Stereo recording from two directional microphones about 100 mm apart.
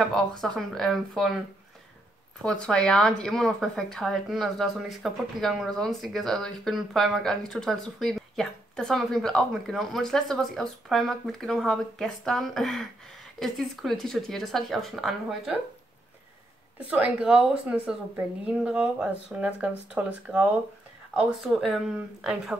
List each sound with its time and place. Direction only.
0.1 s a woman's voice: 5° left (ahead or behind)
2.4 s a woman's voice: 10° left (ahead or behind)
16.9 s a woman's voice: 10° right (ahead or behind)
21.4 s a woman's voice: centre (ahead or behind)